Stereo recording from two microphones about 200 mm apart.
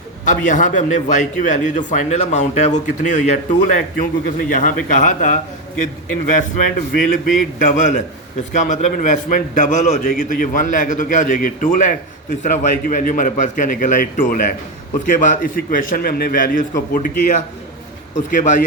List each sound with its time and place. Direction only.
0.3 s a man's voice: 40° left (ahead or behind)
18.3 s a man's voice: 40° left (ahead or behind)